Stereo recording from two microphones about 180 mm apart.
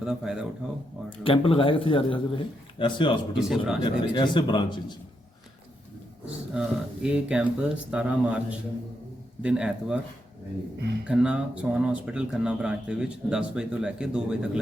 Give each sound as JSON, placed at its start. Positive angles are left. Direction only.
{"t": 0.0, "sound": "speech", "side_deg": -5}
{"t": 1.2, "sound": "a man's voice", "side_deg": 30}
{"t": 3.3, "sound": "speech", "side_deg": -5}
{"t": 3.8, "sound": "a man's voice", "side_deg": 25}
{"t": 6.5, "sound": "speech", "side_deg": -5}
{"t": 11.0, "sound": "speech", "side_deg": -5}